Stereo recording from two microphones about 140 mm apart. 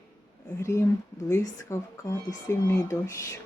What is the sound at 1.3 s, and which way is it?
Speech, 20° left (ahead or behind).